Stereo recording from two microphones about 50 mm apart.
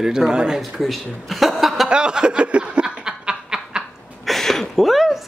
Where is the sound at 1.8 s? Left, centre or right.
Centre.